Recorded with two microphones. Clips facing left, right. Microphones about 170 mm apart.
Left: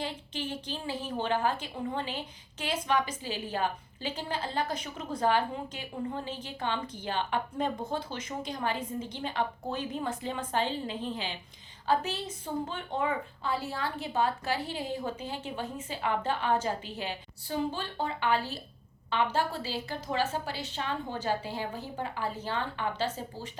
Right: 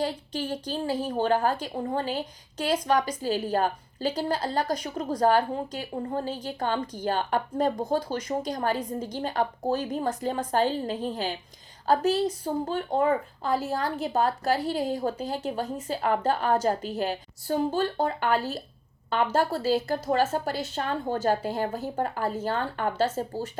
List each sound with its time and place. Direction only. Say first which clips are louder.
0.0 s a woman's voice: right 6 dB; 40° right (ahead or behind)